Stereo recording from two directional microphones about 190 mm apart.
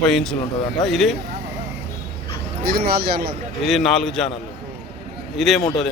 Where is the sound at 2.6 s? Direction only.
55° right (ahead or behind).